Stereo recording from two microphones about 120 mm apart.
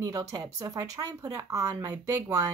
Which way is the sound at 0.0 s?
30° right (ahead or behind).